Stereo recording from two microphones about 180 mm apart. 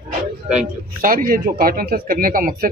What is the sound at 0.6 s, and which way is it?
Speech, 50° right (ahead or behind).